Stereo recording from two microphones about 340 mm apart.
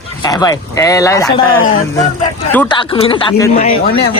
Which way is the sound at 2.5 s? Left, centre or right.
Centre.